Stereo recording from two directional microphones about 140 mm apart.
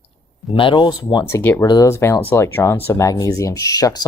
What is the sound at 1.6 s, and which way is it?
Speech, 25° left (ahead or behind).